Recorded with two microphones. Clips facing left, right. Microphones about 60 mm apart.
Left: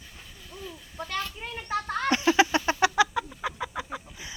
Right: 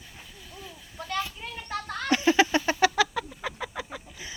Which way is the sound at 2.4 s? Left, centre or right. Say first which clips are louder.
Even; centre.